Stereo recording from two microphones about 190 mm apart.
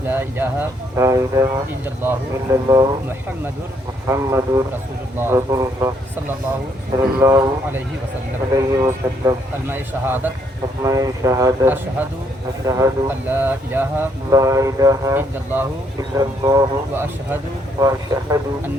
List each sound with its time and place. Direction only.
0.1 s speech: 10° right (ahead or behind)